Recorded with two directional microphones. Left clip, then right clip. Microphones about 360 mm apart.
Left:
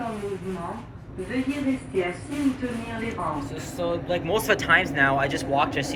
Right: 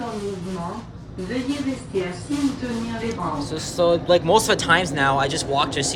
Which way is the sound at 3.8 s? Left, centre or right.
Centre.